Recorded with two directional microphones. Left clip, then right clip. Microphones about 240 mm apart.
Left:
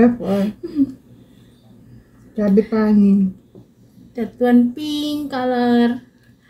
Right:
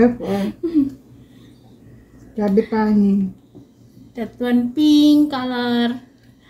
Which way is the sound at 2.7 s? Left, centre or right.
Centre.